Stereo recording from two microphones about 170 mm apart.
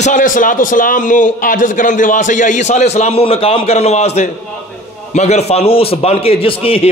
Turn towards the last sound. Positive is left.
turn(degrees=35)  # may be behind; listen again after turning